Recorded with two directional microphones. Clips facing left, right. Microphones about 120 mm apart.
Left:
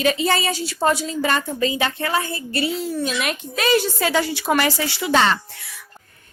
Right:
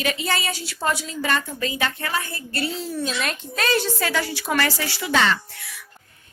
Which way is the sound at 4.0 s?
20° left (ahead or behind).